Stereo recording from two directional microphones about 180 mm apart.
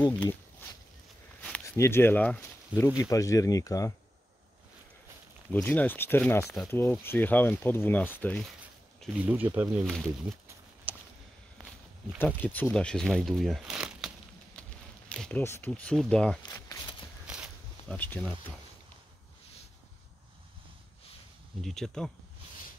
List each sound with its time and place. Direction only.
0.0 s speech: 10° left (ahead or behind)
5.5 s speech: 10° left (ahead or behind)
6.4 s speech: centre (ahead or behind)
6.7 s speech: 15° left (ahead or behind)
9.0 s speech: 10° right (ahead or behind)
12.4 s speech: 10° left (ahead or behind)
17.3 s a sound: 5° right (ahead or behind)
17.9 s speech: 10° left (ahead or behind)
21.5 s speech: centre (ahead or behind)